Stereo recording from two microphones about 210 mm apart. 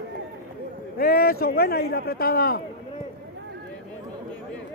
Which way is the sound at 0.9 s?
45° left (ahead or behind).